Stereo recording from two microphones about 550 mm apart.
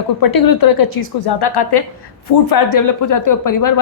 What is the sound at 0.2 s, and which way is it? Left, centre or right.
A woman's voice, left.